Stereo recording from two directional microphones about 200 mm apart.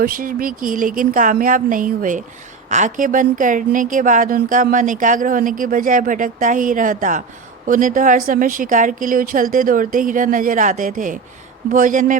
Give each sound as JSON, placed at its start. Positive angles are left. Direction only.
{"t": 0.0, "sound": "a woman's voice", "side_deg": -45}